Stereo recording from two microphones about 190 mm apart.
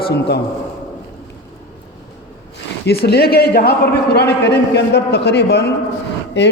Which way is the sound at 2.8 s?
55° left (ahead or behind).